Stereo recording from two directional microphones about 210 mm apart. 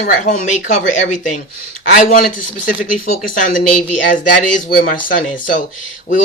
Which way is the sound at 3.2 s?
40° left (ahead or behind).